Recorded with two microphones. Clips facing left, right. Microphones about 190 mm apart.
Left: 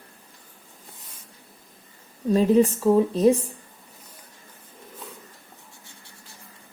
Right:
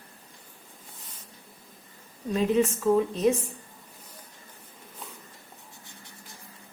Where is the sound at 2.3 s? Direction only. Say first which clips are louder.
Left 6 dB; 35° left (ahead or behind).